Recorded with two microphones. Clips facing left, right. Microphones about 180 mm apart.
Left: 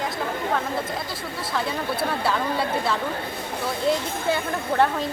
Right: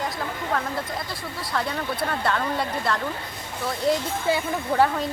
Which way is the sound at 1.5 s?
5° left (ahead or behind).